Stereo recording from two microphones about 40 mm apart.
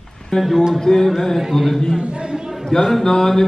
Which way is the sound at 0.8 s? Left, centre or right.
Centre.